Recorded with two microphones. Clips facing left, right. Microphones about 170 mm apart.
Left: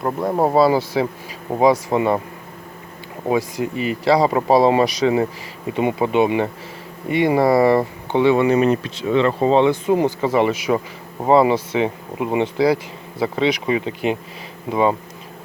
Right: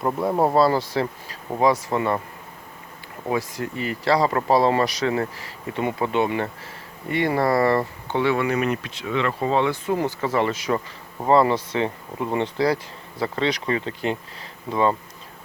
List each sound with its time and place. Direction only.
0.3 s speech: 5° left (ahead or behind)
3.2 s speech: 15° left (ahead or behind)